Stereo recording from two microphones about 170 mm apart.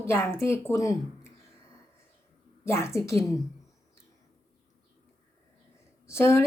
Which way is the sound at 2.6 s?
15° left (ahead or behind).